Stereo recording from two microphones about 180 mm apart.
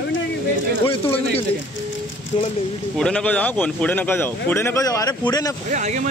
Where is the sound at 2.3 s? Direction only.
30° left (ahead or behind).